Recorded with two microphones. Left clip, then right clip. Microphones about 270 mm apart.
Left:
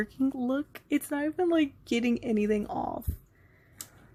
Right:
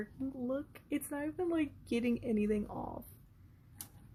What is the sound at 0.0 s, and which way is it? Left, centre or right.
Speech, left.